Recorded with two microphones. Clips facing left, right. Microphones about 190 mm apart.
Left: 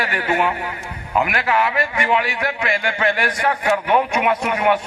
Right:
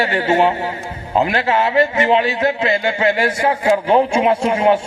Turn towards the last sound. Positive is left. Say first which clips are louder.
# right 4 dB
turn(degrees=-25)  # may be behind; listen again after turning